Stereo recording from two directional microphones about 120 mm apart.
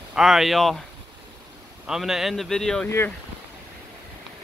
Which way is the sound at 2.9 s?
20° left (ahead or behind).